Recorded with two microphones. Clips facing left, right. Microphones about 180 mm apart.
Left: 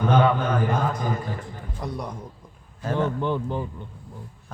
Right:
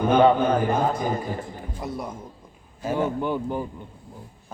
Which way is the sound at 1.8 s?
5° right (ahead or behind).